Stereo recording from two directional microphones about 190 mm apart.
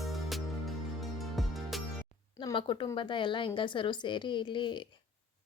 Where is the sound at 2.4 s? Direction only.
25° left (ahead or behind).